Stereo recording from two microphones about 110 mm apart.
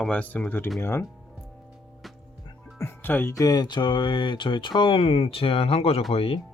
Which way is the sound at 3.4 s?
35° left (ahead or behind).